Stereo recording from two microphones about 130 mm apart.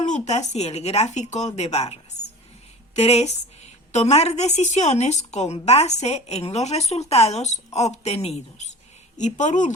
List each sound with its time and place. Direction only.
0.0 s a woman's voice: 65° left (ahead or behind)
9.1 s speech: 70° left (ahead or behind)